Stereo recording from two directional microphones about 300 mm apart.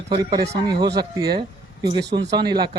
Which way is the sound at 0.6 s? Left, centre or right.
Centre.